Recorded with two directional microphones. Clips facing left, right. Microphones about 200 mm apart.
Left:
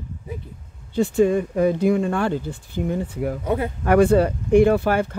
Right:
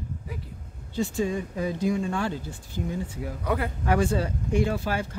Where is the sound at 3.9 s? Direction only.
60° left (ahead or behind).